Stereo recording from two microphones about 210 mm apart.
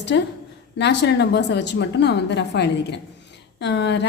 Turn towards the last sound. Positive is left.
turn(degrees=55)  # may be behind; listen again after turning